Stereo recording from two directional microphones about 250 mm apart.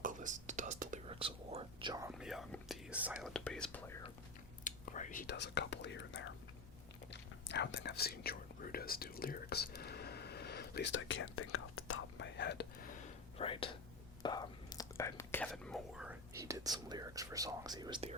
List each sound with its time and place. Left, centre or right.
0.0 s whispering: right; by 2.1 s centre
2.1 s whispering: centre
4.6 s whispering: left
13.4 s whispering: left; by 18.2 s right